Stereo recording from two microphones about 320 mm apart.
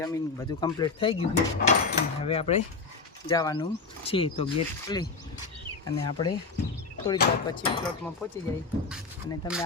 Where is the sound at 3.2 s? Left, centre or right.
Centre.